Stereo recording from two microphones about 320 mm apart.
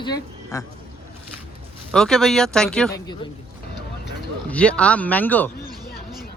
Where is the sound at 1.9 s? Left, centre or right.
Centre.